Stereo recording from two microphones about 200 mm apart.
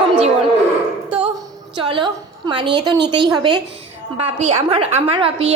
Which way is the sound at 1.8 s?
25° right (ahead or behind).